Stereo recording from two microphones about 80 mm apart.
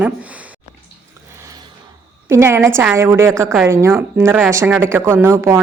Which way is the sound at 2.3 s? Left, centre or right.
Right.